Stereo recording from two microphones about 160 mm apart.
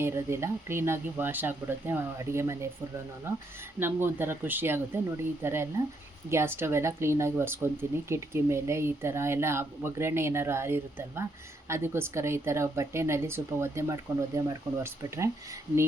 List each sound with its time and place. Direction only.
0.0 s speech: 15° right (ahead or behind)